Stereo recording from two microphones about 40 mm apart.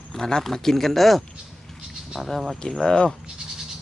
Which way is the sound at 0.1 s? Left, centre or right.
Centre.